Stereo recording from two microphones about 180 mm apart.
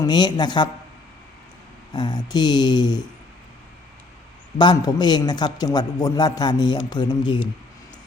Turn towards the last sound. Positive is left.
turn(degrees=25)  # may be behind; listen again after turning